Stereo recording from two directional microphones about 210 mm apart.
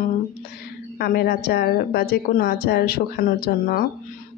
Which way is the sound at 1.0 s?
50° left (ahead or behind).